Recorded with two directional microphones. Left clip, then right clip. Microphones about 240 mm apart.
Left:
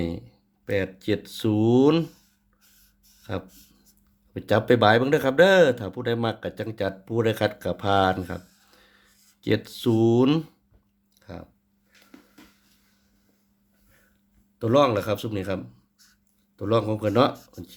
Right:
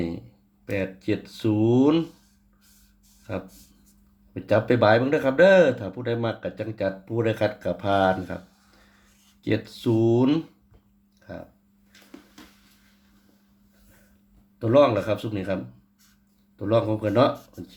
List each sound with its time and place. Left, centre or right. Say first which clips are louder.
0.6 s speech: left 2 dB; left
3.3 s speech: even; left
14.6 s speech: right 2 dB; left
16.6 s speech: right 1 dB; left